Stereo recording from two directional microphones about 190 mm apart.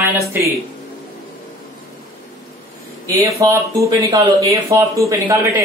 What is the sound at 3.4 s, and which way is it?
A man's voice, 15° right (ahead or behind).